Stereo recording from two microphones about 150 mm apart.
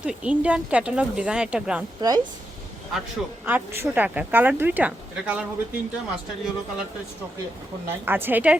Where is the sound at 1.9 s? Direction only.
25° right (ahead or behind).